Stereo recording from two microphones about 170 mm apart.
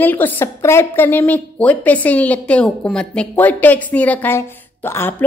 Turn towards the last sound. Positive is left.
turn(degrees=15)  # may be behind; listen again after turning